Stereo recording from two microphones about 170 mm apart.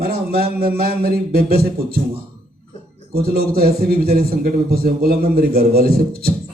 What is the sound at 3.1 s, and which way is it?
Speech, 65° right (ahead or behind).